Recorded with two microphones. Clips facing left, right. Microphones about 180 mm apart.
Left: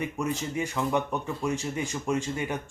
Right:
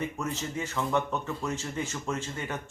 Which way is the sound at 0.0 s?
15° left (ahead or behind).